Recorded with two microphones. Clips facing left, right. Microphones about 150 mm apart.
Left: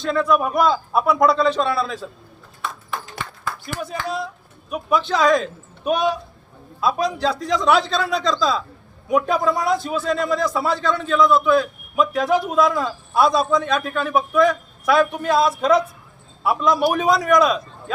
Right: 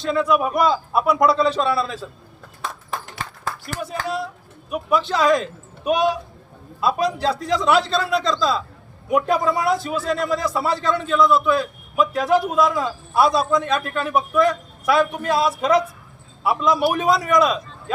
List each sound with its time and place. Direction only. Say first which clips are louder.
0.0 s a man's voice: even; 5° right (ahead or behind)
3.2 s a sound: even; 35° right (ahead or behind)
4.0 s a man's voice: even; 5° right (ahead or behind)